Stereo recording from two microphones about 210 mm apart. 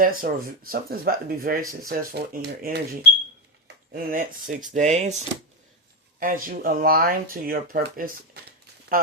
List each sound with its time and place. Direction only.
0.0 s speech: 40° right (ahead or behind)